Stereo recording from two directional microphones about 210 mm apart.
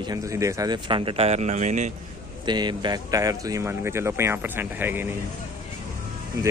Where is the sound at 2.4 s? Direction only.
20° right (ahead or behind).